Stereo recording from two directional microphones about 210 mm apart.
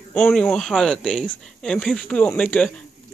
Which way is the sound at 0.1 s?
5° left (ahead or behind).